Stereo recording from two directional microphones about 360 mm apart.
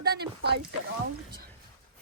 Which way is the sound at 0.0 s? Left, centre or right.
Right.